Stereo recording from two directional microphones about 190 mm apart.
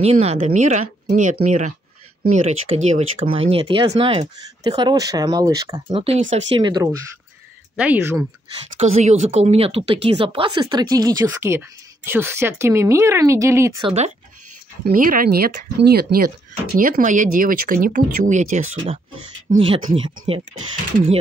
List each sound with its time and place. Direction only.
0.0 s speech: 35° right (ahead or behind)
7.7 s speech: 5° right (ahead or behind)
8.7 s speech: 35° right (ahead or behind); by 13.8 s 15° right (ahead or behind)
13.8 s speech: 35° right (ahead or behind)
15.0 s speech: 50° right (ahead or behind); by 20.4 s 25° right (ahead or behind)